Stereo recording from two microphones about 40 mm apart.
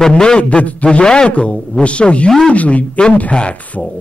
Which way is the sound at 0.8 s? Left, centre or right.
Left.